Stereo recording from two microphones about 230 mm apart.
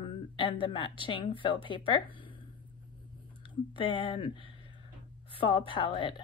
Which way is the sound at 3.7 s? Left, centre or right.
Left.